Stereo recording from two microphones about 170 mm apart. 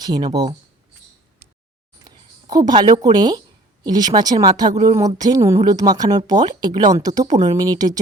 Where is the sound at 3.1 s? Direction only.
25° right (ahead or behind).